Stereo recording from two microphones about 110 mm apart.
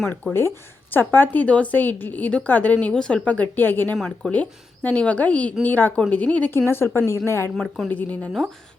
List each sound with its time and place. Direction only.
0.3 s a woman's voice: 20° left (ahead or behind)
3.9 s speech: centre (ahead or behind)
4.3 s a woman's voice: 15° left (ahead or behind)
7.5 s speech: 5° left (ahead or behind)
7.9 s a woman's voice: 15° left (ahead or behind)